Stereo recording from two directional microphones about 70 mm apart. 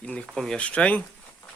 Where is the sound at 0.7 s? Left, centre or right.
Centre.